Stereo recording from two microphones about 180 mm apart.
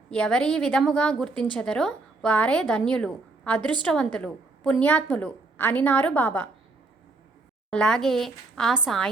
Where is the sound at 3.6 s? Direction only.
25° right (ahead or behind).